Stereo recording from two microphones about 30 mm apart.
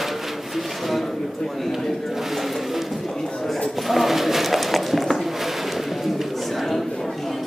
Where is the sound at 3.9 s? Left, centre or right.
Centre.